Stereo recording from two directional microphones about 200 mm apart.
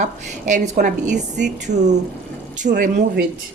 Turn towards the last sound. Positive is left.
turn(degrees=-40)  # may be behind; listen again after turning